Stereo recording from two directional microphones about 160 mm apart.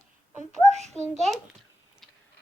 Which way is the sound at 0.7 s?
45° right (ahead or behind).